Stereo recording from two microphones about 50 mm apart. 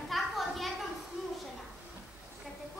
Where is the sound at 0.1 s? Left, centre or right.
Centre.